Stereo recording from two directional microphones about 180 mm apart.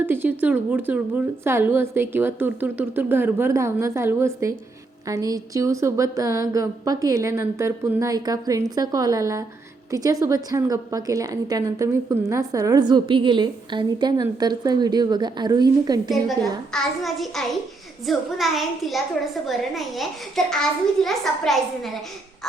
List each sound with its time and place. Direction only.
0.0 s a woman's voice: 10° right (ahead or behind)
16.4 s a woman's voice: centre (ahead or behind)